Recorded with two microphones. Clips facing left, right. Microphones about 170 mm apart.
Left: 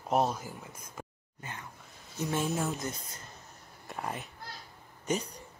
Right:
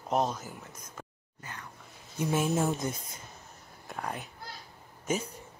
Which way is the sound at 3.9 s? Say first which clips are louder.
Even; centre (ahead or behind).